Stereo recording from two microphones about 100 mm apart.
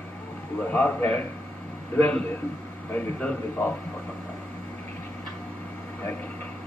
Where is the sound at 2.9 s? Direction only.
10° left (ahead or behind).